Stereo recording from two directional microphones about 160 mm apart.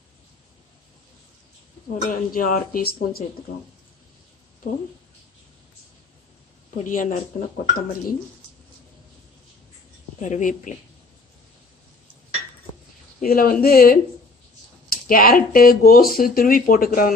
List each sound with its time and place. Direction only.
2.0 s speech: 60° left (ahead or behind)
6.8 s speech: 55° left (ahead or behind)
10.2 s speech: 55° left (ahead or behind)
13.2 s speech: 65° left (ahead or behind)